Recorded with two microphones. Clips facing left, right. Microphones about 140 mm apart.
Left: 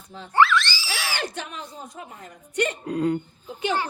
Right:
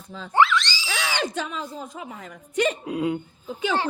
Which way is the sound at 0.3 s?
20° right (ahead or behind).